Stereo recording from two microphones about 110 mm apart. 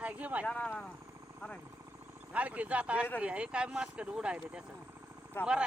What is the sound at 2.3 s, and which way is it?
Speech, 10° right (ahead or behind).